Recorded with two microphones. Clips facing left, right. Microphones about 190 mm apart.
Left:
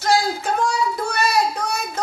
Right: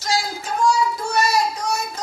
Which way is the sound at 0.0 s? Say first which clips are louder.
Left 5 dB; 60° left (ahead or behind).